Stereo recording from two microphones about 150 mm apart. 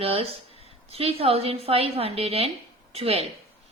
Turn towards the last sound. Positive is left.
turn(degrees=-40)  # may be behind; listen again after turning